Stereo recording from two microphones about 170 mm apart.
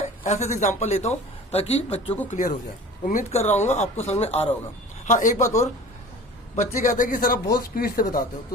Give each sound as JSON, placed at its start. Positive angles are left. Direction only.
{"t": 0.0, "sound": "speech", "side_deg": 40}
{"t": 2.3, "sound": "speech", "side_deg": 50}
{"t": 6.6, "sound": "speech", "side_deg": 50}